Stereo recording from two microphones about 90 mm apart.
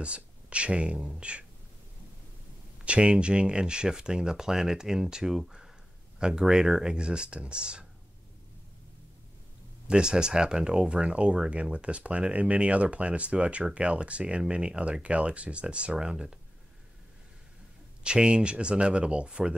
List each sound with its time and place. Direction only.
0.0 s speech: 10° right (ahead or behind)
2.8 s speech: 10° right (ahead or behind)
9.8 s speech: 10° right (ahead or behind)
18.0 s speech: 10° right (ahead or behind)